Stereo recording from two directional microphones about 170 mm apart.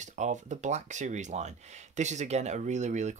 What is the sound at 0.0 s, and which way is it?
Speech, 45° right (ahead or behind).